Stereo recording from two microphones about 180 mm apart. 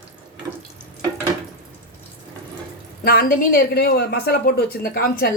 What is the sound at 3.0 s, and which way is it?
Speech, 55° left (ahead or behind).